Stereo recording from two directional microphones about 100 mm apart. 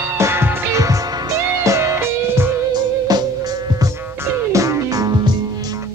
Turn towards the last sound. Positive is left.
turn(degrees=-40)  # may be behind; listen again after turning